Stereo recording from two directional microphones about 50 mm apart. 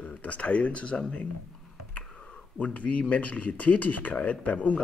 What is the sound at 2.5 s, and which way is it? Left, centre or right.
Speech, left.